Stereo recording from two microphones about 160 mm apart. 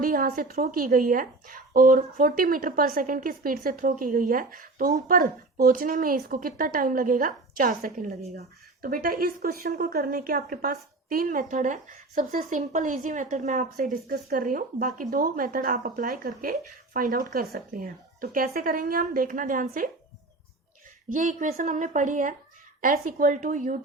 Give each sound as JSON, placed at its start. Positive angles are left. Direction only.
{"t": 0.0, "sound": "a woman's voice", "side_deg": -60}
{"t": 21.1, "sound": "a woman's voice", "side_deg": -50}